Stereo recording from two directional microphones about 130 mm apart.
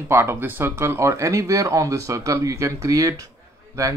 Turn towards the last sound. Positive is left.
turn(degrees=-25)  # may be behind; listen again after turning